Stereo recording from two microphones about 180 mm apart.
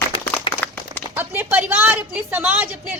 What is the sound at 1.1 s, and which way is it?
A woman's voice, 10° right (ahead or behind).